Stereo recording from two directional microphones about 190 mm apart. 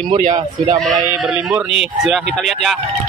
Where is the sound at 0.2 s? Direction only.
40° right (ahead or behind).